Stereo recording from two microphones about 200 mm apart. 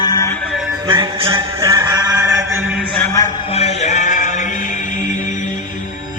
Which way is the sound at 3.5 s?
30° left (ahead or behind).